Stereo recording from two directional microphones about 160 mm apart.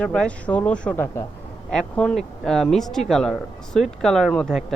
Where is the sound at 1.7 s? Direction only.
5° left (ahead or behind).